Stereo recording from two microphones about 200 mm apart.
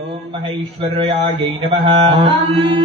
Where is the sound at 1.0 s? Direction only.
25° right (ahead or behind).